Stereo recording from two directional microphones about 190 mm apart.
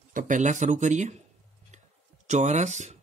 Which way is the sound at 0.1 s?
45° right (ahead or behind).